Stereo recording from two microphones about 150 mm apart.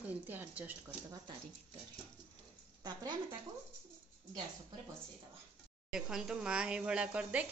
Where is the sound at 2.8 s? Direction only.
25° right (ahead or behind).